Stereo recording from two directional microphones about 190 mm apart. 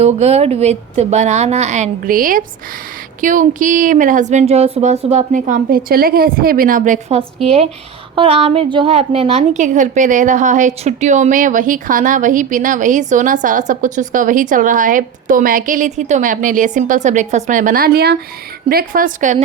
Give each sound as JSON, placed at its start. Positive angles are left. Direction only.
{"t": 0.0, "sound": "a woman's voice", "side_deg": -35}